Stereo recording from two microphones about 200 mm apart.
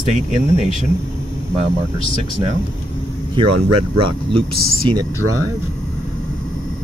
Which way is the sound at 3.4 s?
25° right (ahead or behind).